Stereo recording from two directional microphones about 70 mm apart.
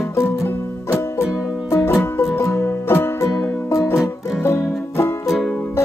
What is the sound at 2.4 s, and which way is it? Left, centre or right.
Music, left.